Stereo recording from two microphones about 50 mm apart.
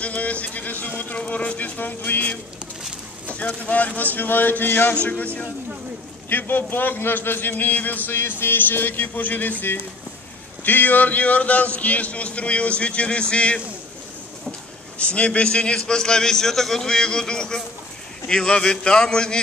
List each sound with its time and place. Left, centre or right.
0.0 s a sound: left
3.3 s a man's voice: left
4.9 s a man's voice: left
6.2 s a man's voice: left
8.2 s a man's voice: left
15.0 s a man's voice: left